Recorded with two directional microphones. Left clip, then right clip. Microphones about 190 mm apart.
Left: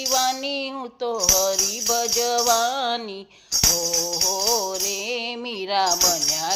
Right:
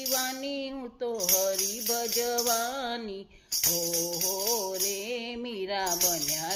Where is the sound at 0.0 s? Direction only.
5° right (ahead or behind).